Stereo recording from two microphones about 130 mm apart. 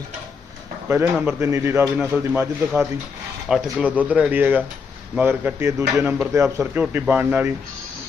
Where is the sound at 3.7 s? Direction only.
10° right (ahead or behind).